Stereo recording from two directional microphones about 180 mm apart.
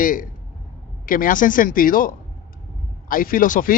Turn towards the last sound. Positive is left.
turn(degrees=50)  # may be behind; listen again after turning